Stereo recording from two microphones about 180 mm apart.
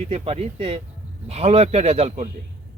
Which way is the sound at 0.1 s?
35° right (ahead or behind).